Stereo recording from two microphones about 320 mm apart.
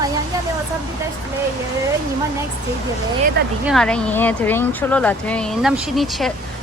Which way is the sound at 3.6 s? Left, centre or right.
Centre.